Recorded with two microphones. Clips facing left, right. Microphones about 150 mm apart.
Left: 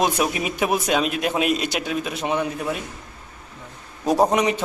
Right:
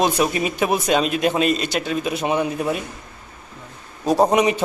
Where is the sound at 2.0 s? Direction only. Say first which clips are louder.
Right 4 dB; 5° right (ahead or behind).